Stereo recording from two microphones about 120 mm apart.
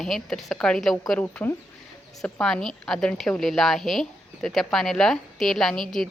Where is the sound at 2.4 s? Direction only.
5° left (ahead or behind).